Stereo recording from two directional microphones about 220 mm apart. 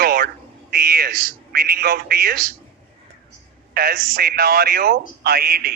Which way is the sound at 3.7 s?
45° right (ahead or behind).